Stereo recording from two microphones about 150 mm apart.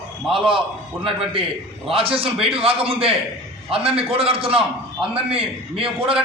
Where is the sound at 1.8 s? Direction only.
40° right (ahead or behind).